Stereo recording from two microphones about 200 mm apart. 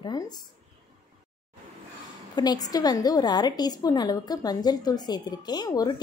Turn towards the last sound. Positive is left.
turn(degrees=20)  # may be behind; listen again after turning